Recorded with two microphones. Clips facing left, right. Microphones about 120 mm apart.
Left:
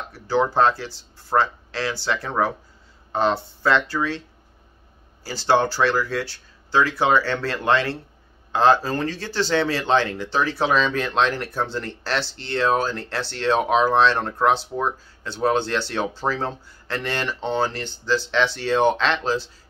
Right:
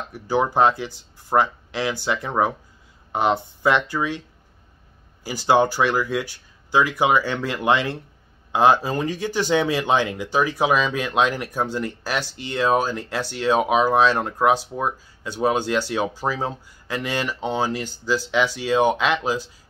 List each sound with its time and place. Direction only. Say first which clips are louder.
0.1 s speech: even; 15° right (ahead or behind)
5.2 s speech: right 2 dB; 15° right (ahead or behind)